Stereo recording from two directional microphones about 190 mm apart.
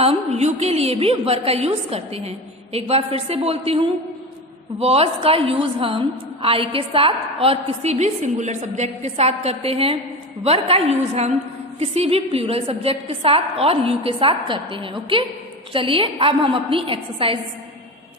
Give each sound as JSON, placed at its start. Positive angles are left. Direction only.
{"t": 0.0, "sound": "a woman's voice", "side_deg": -35}